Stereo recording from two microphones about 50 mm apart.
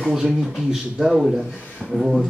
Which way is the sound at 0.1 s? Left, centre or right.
Centre.